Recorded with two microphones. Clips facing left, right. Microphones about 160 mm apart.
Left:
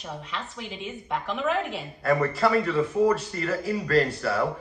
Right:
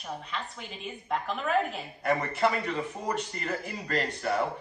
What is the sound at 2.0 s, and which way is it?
Speech, 20° right (ahead or behind).